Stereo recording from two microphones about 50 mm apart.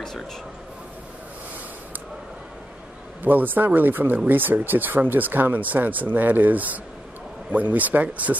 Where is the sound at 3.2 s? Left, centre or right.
Right.